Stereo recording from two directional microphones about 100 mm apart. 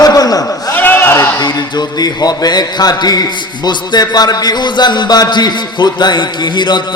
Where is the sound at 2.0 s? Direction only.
40° left (ahead or behind).